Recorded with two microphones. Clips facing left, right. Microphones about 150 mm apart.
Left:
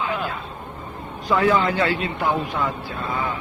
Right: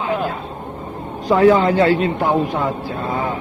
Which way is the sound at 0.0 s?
40° right (ahead or behind).